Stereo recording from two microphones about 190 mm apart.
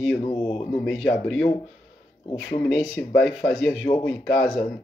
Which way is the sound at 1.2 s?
5° left (ahead or behind).